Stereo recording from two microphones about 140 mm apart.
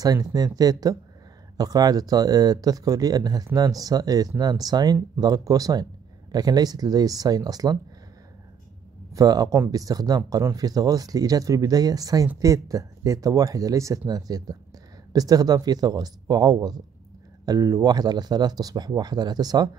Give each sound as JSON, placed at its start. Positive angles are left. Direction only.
{"t": 0.0, "sound": "speech", "side_deg": -25}
{"t": 9.1, "sound": "speech", "side_deg": -25}